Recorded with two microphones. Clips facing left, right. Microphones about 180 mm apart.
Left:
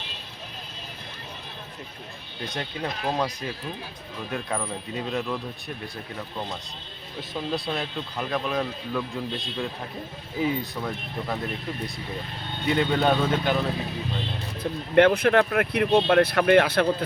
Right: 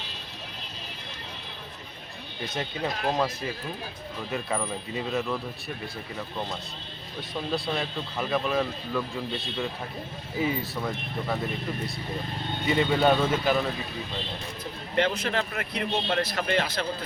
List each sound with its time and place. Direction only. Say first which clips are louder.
2.6 s speech: right 1 dB; 5° right (ahead or behind)
7.2 s speech: left 1 dB; centre (ahead or behind)
10.3 s speech: left 2 dB; centre (ahead or behind)
12.6 s speech: even; centre (ahead or behind)
14.6 s speech: left 9 dB; 60° left (ahead or behind)